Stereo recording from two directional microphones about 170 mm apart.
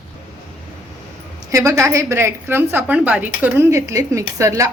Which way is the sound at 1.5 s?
20° right (ahead or behind).